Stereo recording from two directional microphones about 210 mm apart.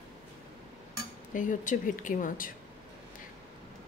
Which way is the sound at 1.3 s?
40° left (ahead or behind).